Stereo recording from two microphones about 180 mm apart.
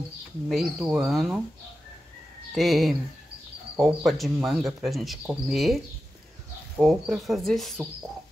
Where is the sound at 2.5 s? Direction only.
Centre (ahead or behind).